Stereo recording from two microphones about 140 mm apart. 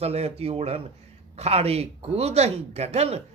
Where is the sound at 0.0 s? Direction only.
50° right (ahead or behind).